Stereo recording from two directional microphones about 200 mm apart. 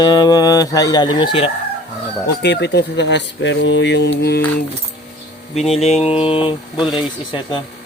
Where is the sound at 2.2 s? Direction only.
55° left (ahead or behind).